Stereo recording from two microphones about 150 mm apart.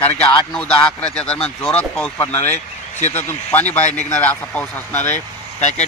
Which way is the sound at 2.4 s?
50° left (ahead or behind).